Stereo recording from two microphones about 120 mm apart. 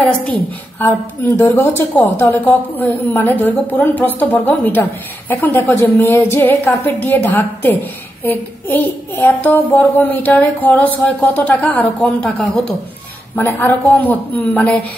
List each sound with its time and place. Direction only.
0.7 s a child's voice: 15° left (ahead or behind)
13.4 s a child's voice: 15° left (ahead or behind)